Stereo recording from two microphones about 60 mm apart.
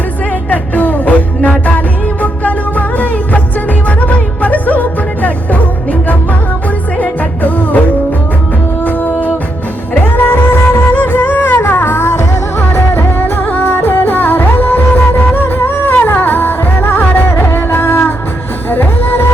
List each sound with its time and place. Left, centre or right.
0.5 s music: left
7.0 s music: left
9.9 s music: left